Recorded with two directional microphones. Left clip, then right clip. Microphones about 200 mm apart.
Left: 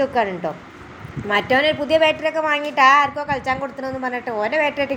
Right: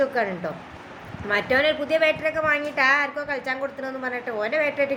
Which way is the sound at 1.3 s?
20° left (ahead or behind).